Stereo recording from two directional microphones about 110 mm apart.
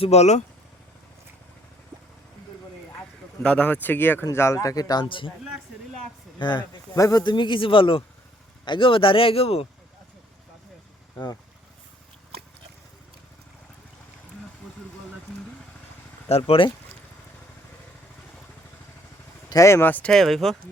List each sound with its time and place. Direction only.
0.0 s speech: 75° left (ahead or behind)
3.4 s speech: 10° left (ahead or behind); by 5.3 s 50° left (ahead or behind)
6.4 s speech: 45° left (ahead or behind)
6.9 s speech: 30° left (ahead or behind); by 9.6 s 65° left (ahead or behind)
16.3 s speech: 75° left (ahead or behind)
19.5 s speech: 30° left (ahead or behind); by 20.6 s centre (ahead or behind)